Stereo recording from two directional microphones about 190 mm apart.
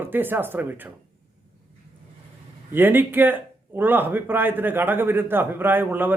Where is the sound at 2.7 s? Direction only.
10° right (ahead or behind).